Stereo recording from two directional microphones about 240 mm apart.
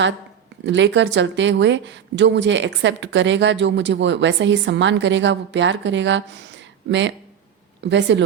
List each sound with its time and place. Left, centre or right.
0.6 s speech: right
7.9 s speech: right